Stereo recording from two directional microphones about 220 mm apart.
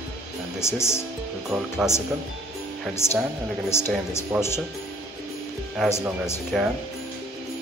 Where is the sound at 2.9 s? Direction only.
10° left (ahead or behind).